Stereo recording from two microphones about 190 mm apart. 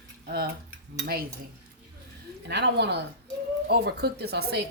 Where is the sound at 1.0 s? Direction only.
55° right (ahead or behind).